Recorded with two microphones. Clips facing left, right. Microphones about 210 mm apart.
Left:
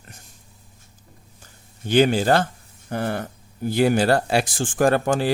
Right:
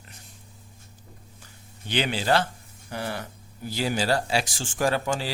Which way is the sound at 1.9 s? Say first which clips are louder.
Left 7 dB; 45° left (ahead or behind).